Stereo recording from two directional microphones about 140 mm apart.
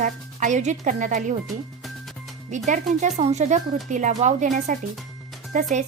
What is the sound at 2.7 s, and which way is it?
Speech, 55° right (ahead or behind).